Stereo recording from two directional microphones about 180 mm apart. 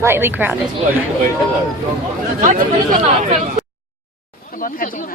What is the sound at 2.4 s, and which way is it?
Speech, 45° right (ahead or behind).